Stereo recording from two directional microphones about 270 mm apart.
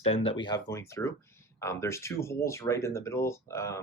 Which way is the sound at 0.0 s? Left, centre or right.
Left.